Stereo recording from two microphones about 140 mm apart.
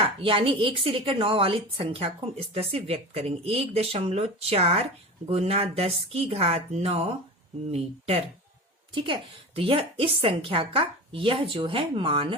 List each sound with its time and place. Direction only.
0.2 s a woman's voice: 40° right (ahead or behind)